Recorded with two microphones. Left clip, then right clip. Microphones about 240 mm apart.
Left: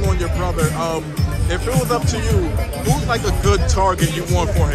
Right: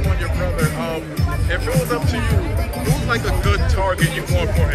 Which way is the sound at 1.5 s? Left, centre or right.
Left.